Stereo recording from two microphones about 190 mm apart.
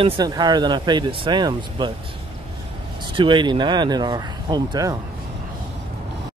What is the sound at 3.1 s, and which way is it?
Speech, 25° right (ahead or behind).